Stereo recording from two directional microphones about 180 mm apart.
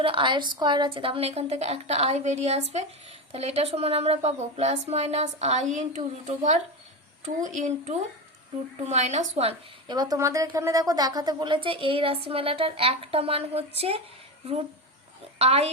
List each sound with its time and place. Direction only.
0.0 s a woman's voice: 30° right (ahead or behind)
9.9 s a woman's voice: 20° right (ahead or behind)
15.4 s a woman's voice: 35° right (ahead or behind)